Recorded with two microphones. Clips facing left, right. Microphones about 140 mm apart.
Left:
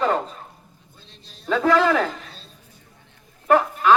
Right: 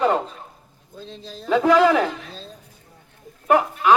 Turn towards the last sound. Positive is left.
turn(degrees=-15)  # may be behind; listen again after turning